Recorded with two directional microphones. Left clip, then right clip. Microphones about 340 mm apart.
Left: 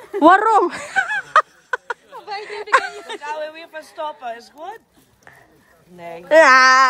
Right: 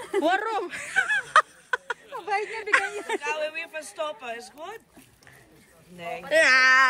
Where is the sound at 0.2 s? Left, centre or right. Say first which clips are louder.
Left 14 dB; centre.